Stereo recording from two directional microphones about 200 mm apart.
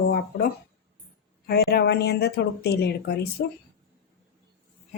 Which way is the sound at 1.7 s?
55° left (ahead or behind).